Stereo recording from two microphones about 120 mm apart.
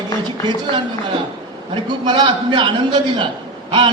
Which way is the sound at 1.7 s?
40° right (ahead or behind).